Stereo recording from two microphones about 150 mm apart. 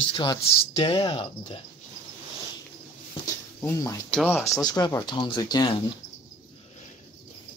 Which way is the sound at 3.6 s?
20° left (ahead or behind).